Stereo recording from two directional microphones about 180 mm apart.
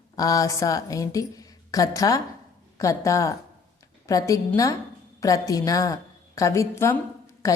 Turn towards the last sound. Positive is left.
turn(degrees=20)  # may be behind; listen again after turning